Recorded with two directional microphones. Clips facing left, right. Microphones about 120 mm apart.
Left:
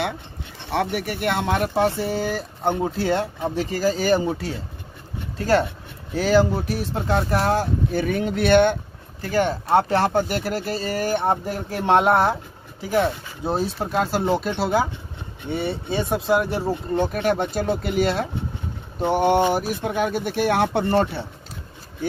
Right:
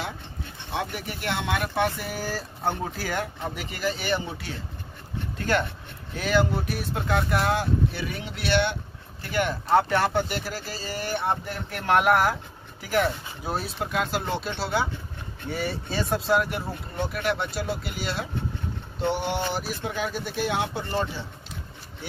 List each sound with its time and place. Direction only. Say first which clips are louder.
0.7 s speech: left 8 dB; 65° left (ahead or behind); by 1.7 s 40° left (ahead or behind)
1.8 s speech: left 6 dB; 25° left (ahead or behind); by 8.7 s 45° left (ahead or behind)
9.2 s speech: left 5 dB; 35° left (ahead or behind)
10.2 s speech: left 7 dB; 50° left (ahead or behind)
11.8 s speech: left 3 dB; 25° left (ahead or behind)
13.7 s speech: left 5 dB; 35° left (ahead or behind)
15.4 s speech: left 4 dB; 25° left (ahead or behind)
17.0 s speech: left 4 dB; 45° left (ahead or behind); by 21.3 s 60° left (ahead or behind)